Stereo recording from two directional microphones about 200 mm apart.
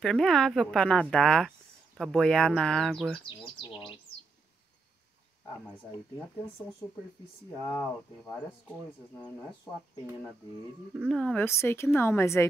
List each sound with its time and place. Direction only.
0.0 s speech: 5° left (ahead or behind)
3.3 s speech: 25° left (ahead or behind)
5.7 s a woman's voice: 5° left (ahead or behind)
8.3 s a woman's voice: 10° left (ahead or behind)
11.0 s a woman's voice: centre (ahead or behind)